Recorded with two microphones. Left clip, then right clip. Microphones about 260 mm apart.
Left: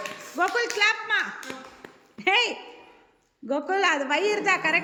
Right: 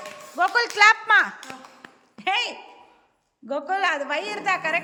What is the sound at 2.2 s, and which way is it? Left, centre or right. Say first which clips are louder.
A woman's voice: left 2 dB; centre.